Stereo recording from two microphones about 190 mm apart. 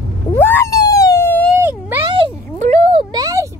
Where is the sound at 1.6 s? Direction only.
10° right (ahead or behind).